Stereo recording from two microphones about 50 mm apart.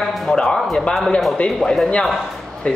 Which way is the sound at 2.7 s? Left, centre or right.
Left.